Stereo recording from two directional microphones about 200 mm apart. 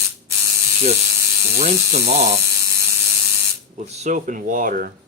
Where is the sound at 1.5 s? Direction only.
35° right (ahead or behind).